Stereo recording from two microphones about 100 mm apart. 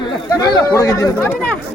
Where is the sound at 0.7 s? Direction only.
30° left (ahead or behind).